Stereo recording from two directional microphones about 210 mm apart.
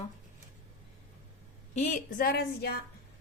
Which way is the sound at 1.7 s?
35° left (ahead or behind).